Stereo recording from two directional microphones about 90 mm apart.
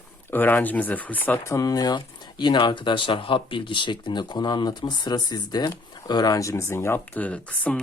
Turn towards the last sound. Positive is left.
turn(degrees=15)  # may be behind; listen again after turning